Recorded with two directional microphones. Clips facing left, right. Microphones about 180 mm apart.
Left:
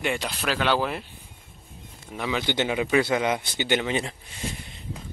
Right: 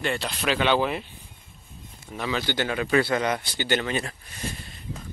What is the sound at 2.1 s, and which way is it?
Speech, 10° left (ahead or behind).